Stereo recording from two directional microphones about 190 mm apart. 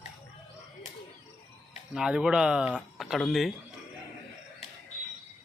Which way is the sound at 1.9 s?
5° right (ahead or behind).